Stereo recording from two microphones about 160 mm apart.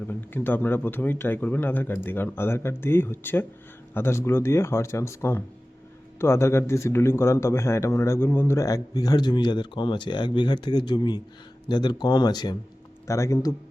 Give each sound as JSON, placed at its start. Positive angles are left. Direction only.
{"t": 0.1, "sound": "speech", "side_deg": 15}